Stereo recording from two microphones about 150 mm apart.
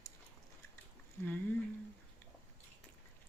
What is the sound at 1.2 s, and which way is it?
Speech, 15° left (ahead or behind).